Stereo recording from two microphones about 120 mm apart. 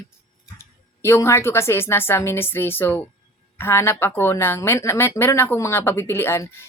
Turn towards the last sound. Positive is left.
turn(degrees=20)  # may be behind; listen again after turning